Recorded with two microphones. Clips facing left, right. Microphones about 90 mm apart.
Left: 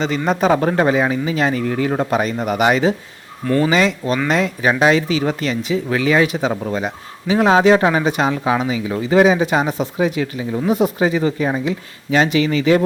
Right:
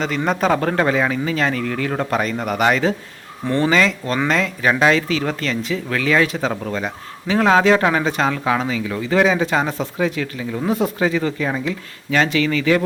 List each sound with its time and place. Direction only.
0.3 s a man's voice: 5° left (ahead or behind)
0.6 s speech: 15° left (ahead or behind)